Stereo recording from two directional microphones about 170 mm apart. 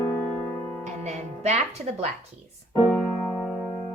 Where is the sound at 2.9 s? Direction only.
5° left (ahead or behind).